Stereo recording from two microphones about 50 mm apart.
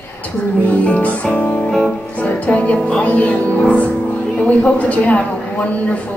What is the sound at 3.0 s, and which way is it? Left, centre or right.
Speech, left.